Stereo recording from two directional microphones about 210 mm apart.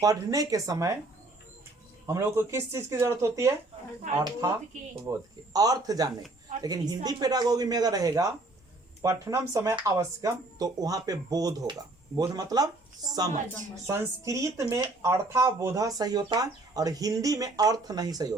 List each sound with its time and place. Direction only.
0.0 s speech: 15° right (ahead or behind)
2.0 s speech: 10° right (ahead or behind)